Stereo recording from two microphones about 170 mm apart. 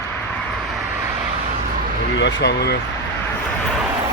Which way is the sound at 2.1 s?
90° left.